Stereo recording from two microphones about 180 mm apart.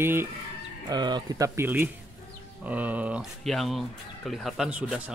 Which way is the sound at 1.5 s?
10° right (ahead or behind).